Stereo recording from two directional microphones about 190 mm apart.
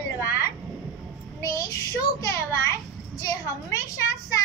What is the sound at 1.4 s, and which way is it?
Children playing, 15° left (ahead or behind).